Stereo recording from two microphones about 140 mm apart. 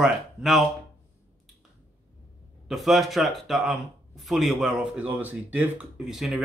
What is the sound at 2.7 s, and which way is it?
Speech, centre (ahead or behind).